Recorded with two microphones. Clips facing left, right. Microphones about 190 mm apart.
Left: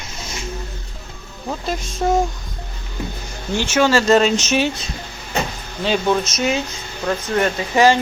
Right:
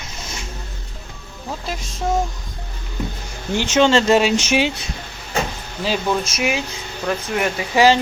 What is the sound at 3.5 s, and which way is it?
Speech, 20° right (ahead or behind).